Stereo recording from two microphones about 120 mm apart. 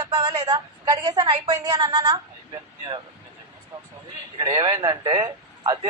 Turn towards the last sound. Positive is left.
turn(degrees=-30)  # may be behind; listen again after turning